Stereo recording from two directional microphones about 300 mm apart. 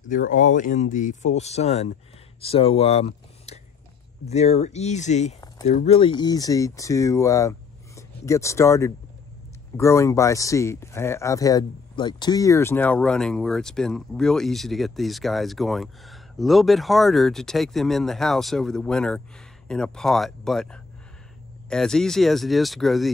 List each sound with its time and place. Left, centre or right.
0.1 s speech: left; by 23.1 s centre